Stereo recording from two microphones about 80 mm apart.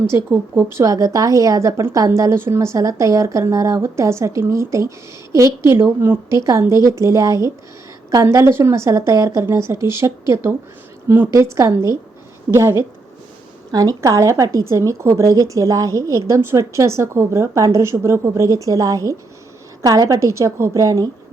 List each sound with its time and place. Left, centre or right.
0.3 s a woman's voice: right
0.9 s a woman's voice: right
6.3 s a woman's voice: right
11.3 s a woman's voice: right
13.7 s a woman's voice: right